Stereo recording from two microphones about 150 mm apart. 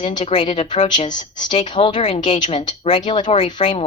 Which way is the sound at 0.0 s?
35° left (ahead or behind).